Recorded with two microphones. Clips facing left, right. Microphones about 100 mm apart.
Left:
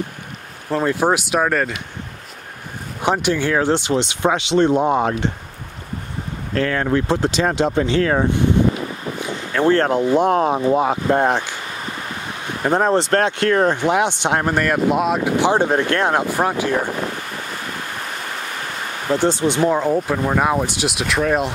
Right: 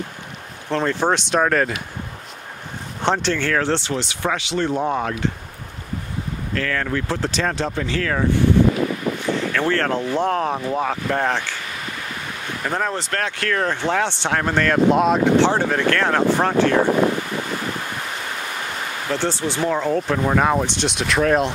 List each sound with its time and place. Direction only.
0.7 s speech: 10° left (ahead or behind)
3.0 s speech: 10° left (ahead or behind)
6.5 s speech: 25° left (ahead or behind)
9.5 s speech: 20° left (ahead or behind)
12.6 s speech: 25° left (ahead or behind)
13.7 s speech: 15° left (ahead or behind)
19.0 s speech: 20° left (ahead or behind)